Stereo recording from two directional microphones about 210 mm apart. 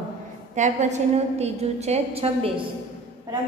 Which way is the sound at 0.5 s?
35° right (ahead or behind).